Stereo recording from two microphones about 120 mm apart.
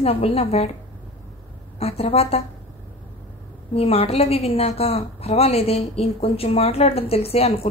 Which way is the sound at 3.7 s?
55° left (ahead or behind).